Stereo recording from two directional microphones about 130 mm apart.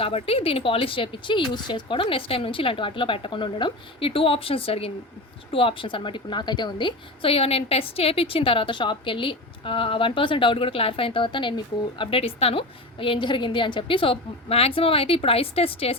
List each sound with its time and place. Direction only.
0.0 s a woman's voice: 45° left (ahead or behind)